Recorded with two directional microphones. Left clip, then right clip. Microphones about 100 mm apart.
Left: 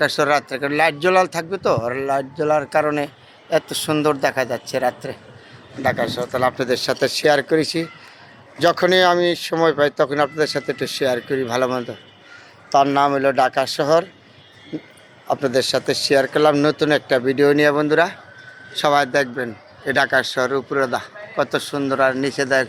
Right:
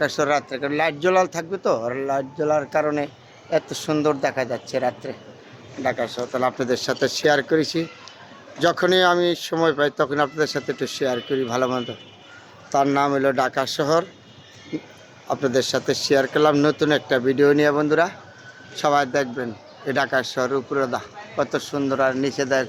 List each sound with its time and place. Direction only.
0.0 s a man's voice: 60° left (ahead or behind)
5.8 s speech: 55° left (ahead or behind); by 11.9 s 20° left (ahead or behind)
12.7 s a man's voice: centre (ahead or behind)
15.3 s speech: 10° left (ahead or behind); by 21.1 s 30° left (ahead or behind)
21.3 s a man's voice: 40° left (ahead or behind)